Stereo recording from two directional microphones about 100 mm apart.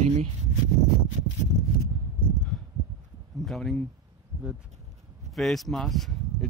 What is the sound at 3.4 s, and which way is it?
Speech, centre (ahead or behind).